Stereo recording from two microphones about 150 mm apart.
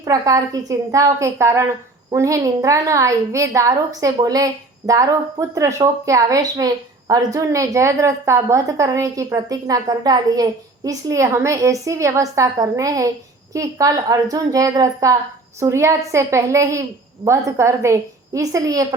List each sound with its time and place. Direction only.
0.0 s a woman's voice: 25° right (ahead or behind)